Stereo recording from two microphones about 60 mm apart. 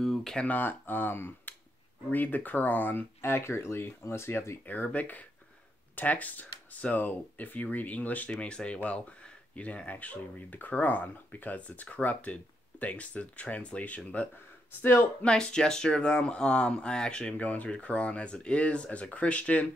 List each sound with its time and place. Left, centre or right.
0.0 s a sound: centre
0.4 s speech: left
3.2 s speech: left
4.6 s speech: left
14.8 s speech: left
15.2 s speech: centre